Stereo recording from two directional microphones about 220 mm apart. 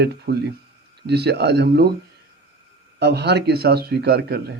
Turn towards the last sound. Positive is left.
turn(degrees=-45)  # may be behind; listen again after turning